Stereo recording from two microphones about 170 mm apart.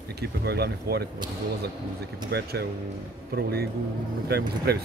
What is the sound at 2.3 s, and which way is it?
Speech, 70° right (ahead or behind).